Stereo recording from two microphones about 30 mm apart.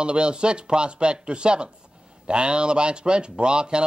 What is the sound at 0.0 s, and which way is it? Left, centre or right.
Speech, right.